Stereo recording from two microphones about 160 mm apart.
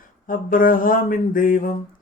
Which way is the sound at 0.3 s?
60° left (ahead or behind).